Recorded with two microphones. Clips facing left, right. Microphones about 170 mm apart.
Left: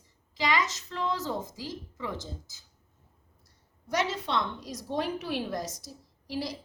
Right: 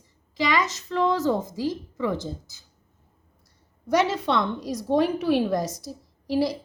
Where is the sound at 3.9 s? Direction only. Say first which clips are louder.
Right 7 dB; 65° right (ahead or behind).